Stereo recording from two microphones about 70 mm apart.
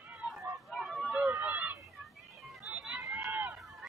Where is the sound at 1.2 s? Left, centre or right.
Right.